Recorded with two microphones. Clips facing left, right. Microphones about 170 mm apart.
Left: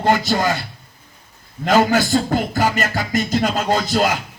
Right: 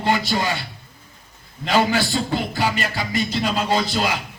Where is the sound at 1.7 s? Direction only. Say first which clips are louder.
Left 4 dB; 45° left (ahead or behind).